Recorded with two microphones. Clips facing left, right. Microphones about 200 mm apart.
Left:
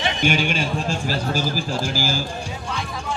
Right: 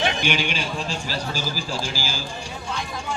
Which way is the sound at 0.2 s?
45° left (ahead or behind).